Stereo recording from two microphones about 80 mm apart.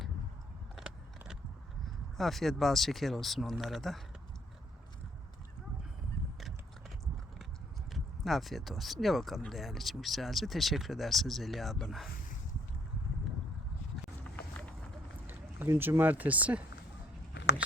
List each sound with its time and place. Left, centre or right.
2.1 s speech: centre
7.9 s speech: centre
15.3 s speech: right